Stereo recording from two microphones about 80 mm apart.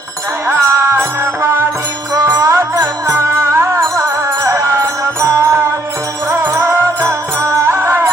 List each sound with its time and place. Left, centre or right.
0.4 s music: right
2.1 s music: right